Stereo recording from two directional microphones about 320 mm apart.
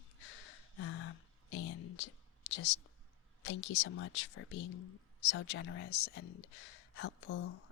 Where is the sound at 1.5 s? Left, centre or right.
Left.